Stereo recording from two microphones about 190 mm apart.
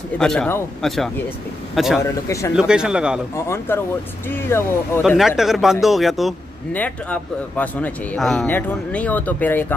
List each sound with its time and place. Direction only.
0.2 s a man's voice: 5° left (ahead or behind)
2.2 s a man's voice: 15° left (ahead or behind)
2.5 s a man's voice: 5° right (ahead or behind)
3.4 s a man's voice: 10° left (ahead or behind)
5.0 s a man's voice: centre (ahead or behind)